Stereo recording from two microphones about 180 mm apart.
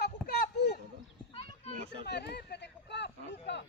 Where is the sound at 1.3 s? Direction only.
35° left (ahead or behind).